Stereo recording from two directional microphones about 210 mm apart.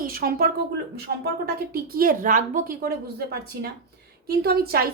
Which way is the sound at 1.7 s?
45° right (ahead or behind).